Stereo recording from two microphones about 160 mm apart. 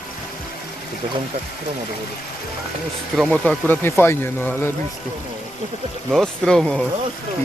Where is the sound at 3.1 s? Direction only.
5° left (ahead or behind).